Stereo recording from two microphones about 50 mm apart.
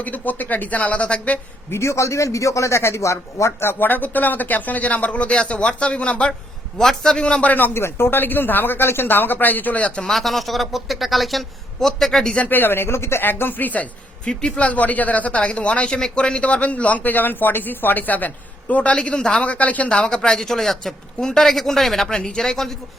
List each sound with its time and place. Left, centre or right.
0.0 s speech: left
1.7 s speech: left
3.6 s speech: left
6.7 s a man's voice: centre
7.4 s a man's voice: left
7.8 s speech: left
10.0 s speech: centre
12.5 s speech: left
14.3 s a man's voice: centre; by 18.3 s left
18.7 s speech: left
19.5 s speech: left
20.0 s a man's voice: centre